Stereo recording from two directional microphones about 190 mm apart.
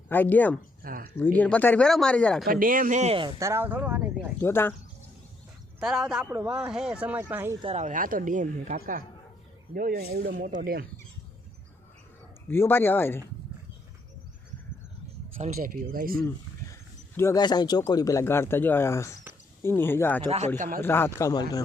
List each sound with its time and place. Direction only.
0.1 s speech: 10° left (ahead or behind)
0.8 s a sound: 50° right (ahead or behind)
1.1 s speech: 10° left (ahead or behind)
2.5 s speech: 45° right (ahead or behind); by 4.3 s 10° right (ahead or behind)
4.4 s speech: 10° left (ahead or behind)
5.8 s speech: 5° right (ahead or behind)
7.6 s speech: 35° right (ahead or behind); by 10.8 s 50° right (ahead or behind)
12.5 s speech: 10° left (ahead or behind)
15.4 s speech: 50° right (ahead or behind)
17.2 s speech: 15° left (ahead or behind)
20.2 s speech: 35° right (ahead or behind)
20.6 s speech: 50° right (ahead or behind)
20.8 s speech: 10° left (ahead or behind)